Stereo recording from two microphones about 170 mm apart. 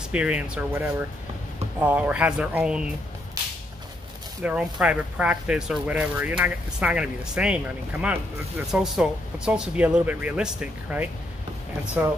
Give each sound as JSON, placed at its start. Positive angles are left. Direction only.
{"t": 0.1, "sound": "speech", "side_deg": -5}
{"t": 4.4, "sound": "speech", "side_deg": -5}